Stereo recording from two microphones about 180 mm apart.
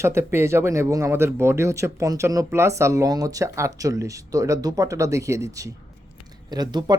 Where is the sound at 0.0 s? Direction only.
15° right (ahead or behind).